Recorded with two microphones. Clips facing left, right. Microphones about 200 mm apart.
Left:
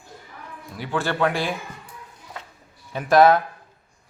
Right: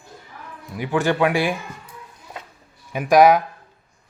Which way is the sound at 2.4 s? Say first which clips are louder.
Right 2 dB; 15° right (ahead or behind).